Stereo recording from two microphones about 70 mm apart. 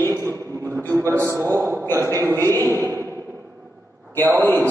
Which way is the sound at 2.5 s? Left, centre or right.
Right.